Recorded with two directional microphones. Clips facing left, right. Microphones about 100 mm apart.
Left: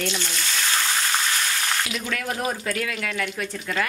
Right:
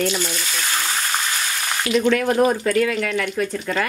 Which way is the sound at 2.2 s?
55° right (ahead or behind).